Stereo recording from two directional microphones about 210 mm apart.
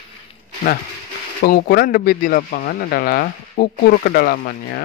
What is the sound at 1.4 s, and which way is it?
Speech, 45° left (ahead or behind).